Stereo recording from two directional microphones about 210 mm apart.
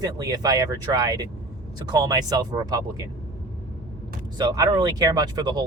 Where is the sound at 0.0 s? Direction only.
15° right (ahead or behind).